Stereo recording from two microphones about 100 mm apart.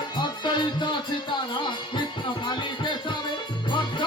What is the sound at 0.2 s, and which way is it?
Music, 50° left (ahead or behind).